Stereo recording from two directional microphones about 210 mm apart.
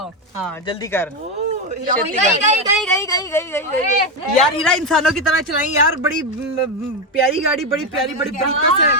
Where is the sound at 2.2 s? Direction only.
35° right (ahead or behind).